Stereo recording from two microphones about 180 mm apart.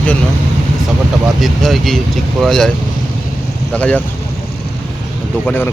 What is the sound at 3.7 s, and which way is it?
Speech, 5° left (ahead or behind).